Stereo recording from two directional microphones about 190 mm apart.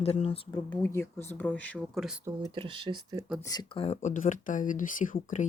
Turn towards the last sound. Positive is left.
turn(degrees=40)  # may be behind; listen again after turning